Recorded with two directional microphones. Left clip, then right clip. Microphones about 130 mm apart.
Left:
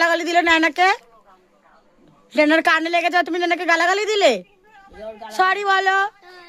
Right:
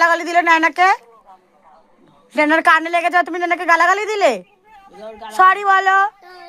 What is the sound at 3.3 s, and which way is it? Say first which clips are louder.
Speech: right 1 dB; 35° left (ahead or behind).